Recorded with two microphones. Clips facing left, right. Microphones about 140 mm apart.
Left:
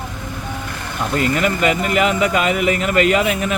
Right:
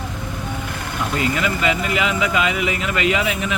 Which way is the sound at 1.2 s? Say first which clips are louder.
Left 4 dB; 45° left (ahead or behind).